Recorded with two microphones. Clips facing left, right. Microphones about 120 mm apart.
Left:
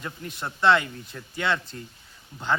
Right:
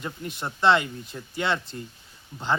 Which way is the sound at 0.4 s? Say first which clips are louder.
Even; 30° right (ahead or behind).